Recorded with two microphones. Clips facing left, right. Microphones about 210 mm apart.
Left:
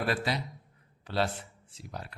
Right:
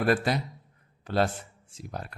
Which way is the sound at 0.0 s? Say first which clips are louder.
Right 6 dB; 50° right (ahead or behind).